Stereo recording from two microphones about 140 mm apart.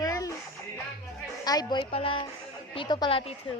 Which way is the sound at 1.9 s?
40° left (ahead or behind).